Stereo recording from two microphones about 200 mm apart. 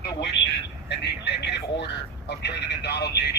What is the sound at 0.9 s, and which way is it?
A man's voice, 55° left (ahead or behind).